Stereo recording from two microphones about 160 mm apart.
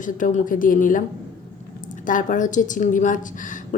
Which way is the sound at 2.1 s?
55° left (ahead or behind).